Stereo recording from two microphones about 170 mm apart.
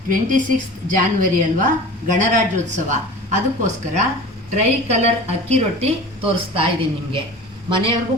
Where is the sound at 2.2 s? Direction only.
45° right (ahead or behind).